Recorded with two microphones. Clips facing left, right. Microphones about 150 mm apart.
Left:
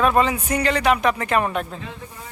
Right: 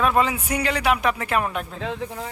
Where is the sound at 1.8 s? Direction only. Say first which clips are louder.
Right 7 dB; 90° right.